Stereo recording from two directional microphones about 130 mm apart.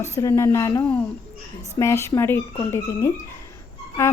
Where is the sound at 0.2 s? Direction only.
20° left (ahead or behind).